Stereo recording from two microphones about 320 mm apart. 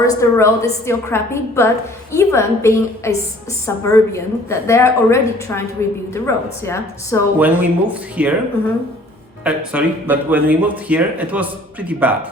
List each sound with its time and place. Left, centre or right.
0.0 s a woman's voice: centre
7.3 s speech: centre
9.4 s speech: centre